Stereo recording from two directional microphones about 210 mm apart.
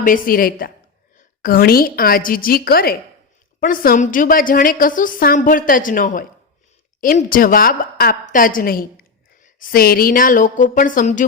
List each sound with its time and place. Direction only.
0.0 s a woman's voice: 40° left (ahead or behind)